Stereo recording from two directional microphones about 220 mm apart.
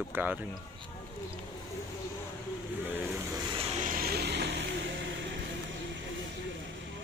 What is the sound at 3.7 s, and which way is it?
Music, 35° right (ahead or behind).